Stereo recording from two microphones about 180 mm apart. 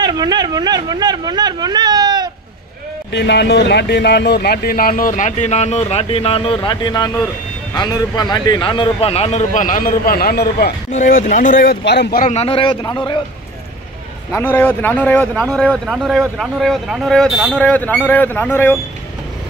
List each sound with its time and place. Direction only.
0.0 s speech: 25° right (ahead or behind)
3.1 s speech: 70° left (ahead or behind)
10.9 s speech: 45° left (ahead or behind); by 12.3 s 65° left (ahead or behind)
12.3 s a man's voice: 35° left (ahead or behind)
14.3 s speech: 10° left (ahead or behind)